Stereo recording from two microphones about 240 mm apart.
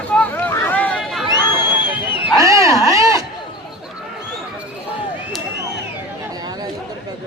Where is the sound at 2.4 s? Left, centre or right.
Centre.